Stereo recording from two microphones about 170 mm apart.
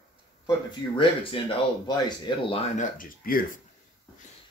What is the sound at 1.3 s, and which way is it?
Speech, 30° left (ahead or behind).